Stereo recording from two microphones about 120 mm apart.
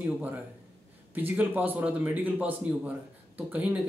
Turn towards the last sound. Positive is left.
turn(degrees=-10)  # may be behind; listen again after turning